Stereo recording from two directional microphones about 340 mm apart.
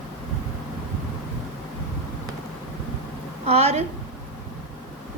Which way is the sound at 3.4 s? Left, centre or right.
Centre.